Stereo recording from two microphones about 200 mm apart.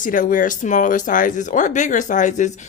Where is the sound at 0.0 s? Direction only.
40° left (ahead or behind).